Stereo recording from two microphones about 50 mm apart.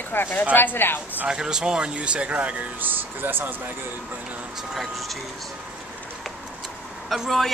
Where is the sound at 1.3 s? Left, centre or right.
Centre; by 3.7 s right.